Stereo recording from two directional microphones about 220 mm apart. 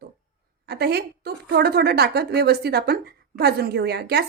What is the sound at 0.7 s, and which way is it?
Speech, 50° right (ahead or behind).